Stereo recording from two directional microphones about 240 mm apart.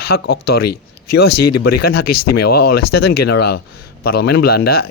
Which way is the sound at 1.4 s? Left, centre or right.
Left.